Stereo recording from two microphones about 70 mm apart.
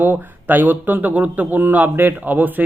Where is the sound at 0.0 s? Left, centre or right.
Right.